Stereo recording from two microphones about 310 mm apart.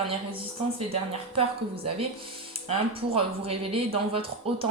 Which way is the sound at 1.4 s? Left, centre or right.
Centre.